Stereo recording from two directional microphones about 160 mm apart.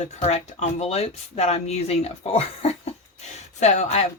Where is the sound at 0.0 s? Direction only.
45° left (ahead or behind).